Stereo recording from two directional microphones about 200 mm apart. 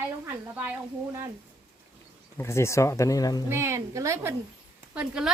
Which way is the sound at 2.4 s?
15° left (ahead or behind).